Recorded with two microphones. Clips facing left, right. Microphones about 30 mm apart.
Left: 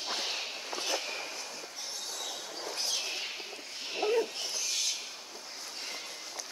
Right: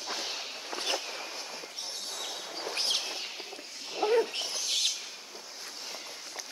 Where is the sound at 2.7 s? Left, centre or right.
Right.